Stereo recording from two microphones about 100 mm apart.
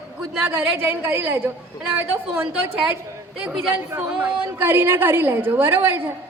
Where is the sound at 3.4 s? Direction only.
5° right (ahead or behind).